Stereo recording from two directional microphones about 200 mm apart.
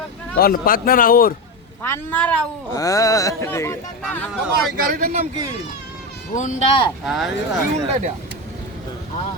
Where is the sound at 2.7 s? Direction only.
15° left (ahead or behind).